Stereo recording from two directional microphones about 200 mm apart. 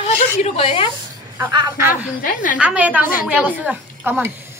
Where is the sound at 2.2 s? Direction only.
45° left (ahead or behind).